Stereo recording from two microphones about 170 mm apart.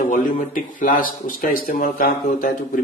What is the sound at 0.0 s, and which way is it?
Speech, 55° left (ahead or behind).